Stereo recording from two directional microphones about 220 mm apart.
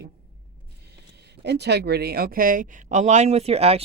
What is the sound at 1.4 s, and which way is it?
Speech, 50° right (ahead or behind).